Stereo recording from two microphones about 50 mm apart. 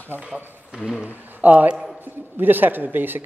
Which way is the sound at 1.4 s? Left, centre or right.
Right.